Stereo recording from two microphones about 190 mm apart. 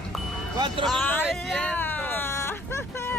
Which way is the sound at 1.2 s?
Centre (ahead or behind).